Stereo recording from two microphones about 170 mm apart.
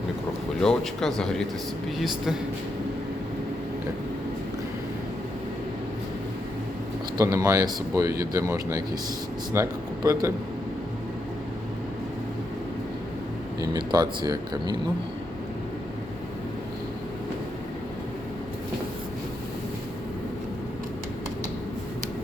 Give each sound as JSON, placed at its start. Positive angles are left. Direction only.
{"t": 0.6, "sound": "speech", "side_deg": 5}
{"t": 7.2, "sound": "speech", "side_deg": -20}
{"t": 13.6, "sound": "speech", "side_deg": -25}